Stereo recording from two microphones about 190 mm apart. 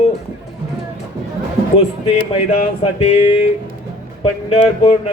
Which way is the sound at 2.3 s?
35° left (ahead or behind).